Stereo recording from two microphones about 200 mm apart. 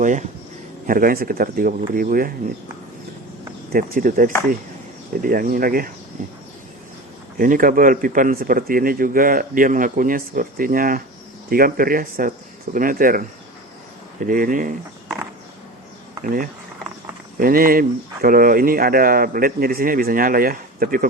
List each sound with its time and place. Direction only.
0.0 s speech: 40° right (ahead or behind)
3.7 s speech: 45° right (ahead or behind)
7.3 s speech: 45° right (ahead or behind)
14.3 s speech: 40° right (ahead or behind)
16.2 s speech: 45° right (ahead or behind)